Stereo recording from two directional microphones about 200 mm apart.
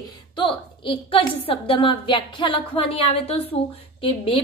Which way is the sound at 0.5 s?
25° left (ahead or behind).